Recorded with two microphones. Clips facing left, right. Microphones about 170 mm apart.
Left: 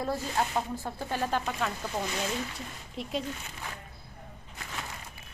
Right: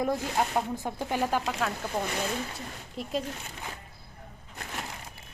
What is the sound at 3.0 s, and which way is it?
Speech, centre (ahead or behind).